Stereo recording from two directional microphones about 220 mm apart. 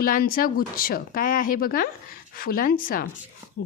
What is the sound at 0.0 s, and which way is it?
A woman's voice, 40° left (ahead or behind).